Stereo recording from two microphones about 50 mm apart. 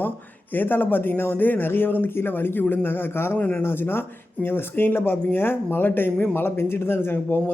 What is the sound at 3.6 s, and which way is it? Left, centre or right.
Speech, left.